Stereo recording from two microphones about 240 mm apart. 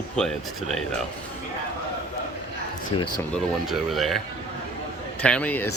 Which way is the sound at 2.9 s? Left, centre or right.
Left.